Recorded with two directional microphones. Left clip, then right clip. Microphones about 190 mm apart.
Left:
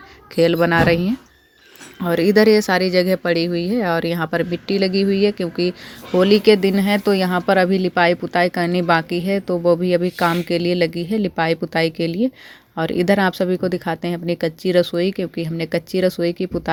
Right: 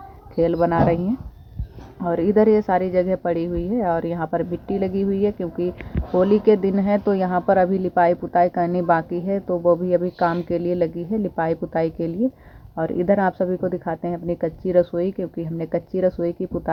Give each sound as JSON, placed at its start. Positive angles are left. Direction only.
{"t": 0.3, "sound": "speech", "side_deg": 45}